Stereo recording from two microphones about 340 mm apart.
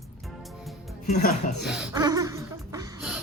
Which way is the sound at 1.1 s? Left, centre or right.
Left.